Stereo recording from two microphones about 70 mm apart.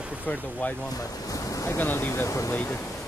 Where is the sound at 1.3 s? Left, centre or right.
Left.